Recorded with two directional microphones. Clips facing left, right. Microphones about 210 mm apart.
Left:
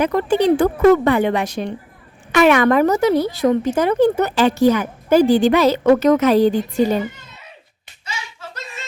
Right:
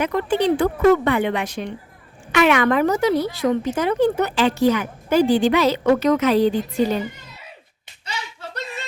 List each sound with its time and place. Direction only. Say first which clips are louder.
0.0 s a woman's voice: left 4 dB; 40° left (ahead or behind)